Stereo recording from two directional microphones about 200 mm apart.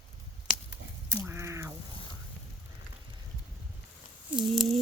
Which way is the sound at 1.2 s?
15° right (ahead or behind).